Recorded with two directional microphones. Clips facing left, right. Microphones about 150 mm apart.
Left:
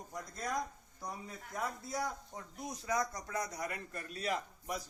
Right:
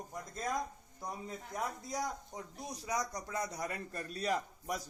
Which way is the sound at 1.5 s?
15° right (ahead or behind).